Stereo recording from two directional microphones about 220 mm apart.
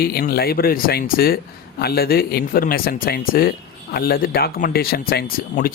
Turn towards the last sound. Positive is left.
turn(degrees=40)  # may be behind; listen again after turning